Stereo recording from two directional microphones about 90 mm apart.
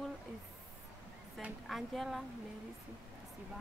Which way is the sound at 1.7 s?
Centre (ahead or behind).